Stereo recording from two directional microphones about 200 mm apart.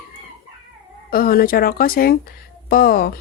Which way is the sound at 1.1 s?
45° left (ahead or behind).